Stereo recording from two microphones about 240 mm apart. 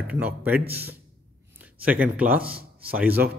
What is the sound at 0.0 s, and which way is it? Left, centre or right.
Speech, centre.